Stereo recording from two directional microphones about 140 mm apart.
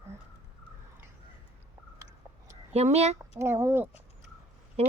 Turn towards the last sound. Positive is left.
turn(degrees=-50)  # may be behind; listen again after turning